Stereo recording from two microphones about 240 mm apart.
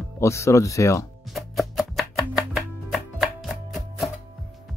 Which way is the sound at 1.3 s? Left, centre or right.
Centre.